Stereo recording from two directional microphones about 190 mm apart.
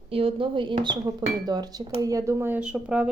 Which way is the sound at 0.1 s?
30° right (ahead or behind).